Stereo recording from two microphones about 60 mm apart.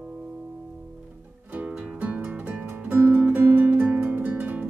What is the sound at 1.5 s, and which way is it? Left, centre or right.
Music, right.